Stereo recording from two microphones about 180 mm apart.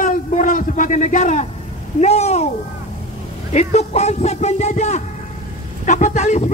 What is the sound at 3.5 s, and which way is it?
Speech, 35° left (ahead or behind).